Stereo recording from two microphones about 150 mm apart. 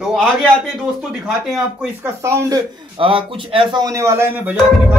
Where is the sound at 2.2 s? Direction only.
20° right (ahead or behind).